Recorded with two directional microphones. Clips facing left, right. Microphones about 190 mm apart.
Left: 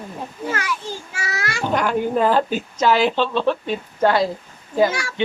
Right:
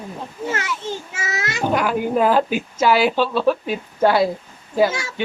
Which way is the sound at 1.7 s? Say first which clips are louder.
Even; 5° right (ahead or behind).